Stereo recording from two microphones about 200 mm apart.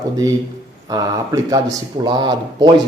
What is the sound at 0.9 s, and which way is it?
Speech, 20° right (ahead or behind).